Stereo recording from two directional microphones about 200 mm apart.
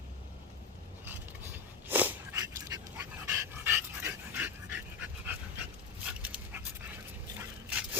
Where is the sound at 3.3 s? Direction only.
10° right (ahead or behind).